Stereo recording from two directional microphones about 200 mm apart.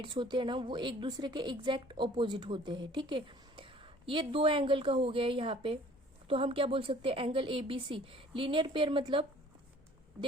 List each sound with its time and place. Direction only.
0.0 s a woman's voice: 25° right (ahead or behind)